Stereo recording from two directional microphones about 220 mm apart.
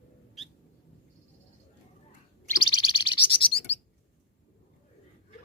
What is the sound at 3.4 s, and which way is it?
Bird, 25° left (ahead or behind).